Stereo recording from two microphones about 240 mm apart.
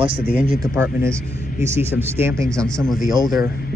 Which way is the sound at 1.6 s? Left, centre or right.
Centre.